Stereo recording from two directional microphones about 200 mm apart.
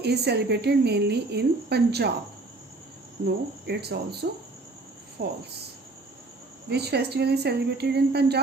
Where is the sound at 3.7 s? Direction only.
55° right (ahead or behind).